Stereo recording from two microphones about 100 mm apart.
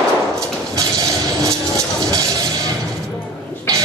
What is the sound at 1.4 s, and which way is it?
Train, 35° right (ahead or behind).